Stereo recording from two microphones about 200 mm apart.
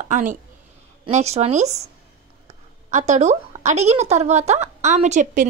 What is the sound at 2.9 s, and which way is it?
A woman's voice, 35° right (ahead or behind).